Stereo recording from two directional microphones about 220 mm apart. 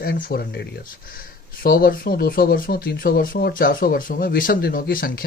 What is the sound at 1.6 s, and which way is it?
Speech, 40° left (ahead or behind).